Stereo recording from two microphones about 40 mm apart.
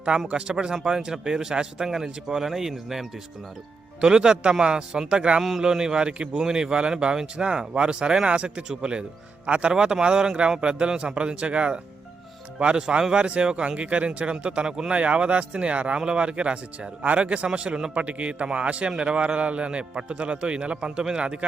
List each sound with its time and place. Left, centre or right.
0.3 s speech: right; by 3.1 s centre
4.0 s a man's voice: centre
5.4 s speech: centre
5.6 s a man's voice: centre
9.7 s a man's voice: centre
14.9 s a man's voice: right